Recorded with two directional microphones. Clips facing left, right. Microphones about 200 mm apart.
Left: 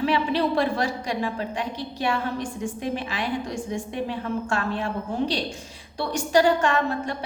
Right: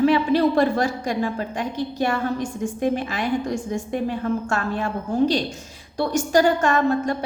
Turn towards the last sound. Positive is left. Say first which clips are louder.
# right 4 dB
turn(degrees=-45)  # may be behind; listen again after turning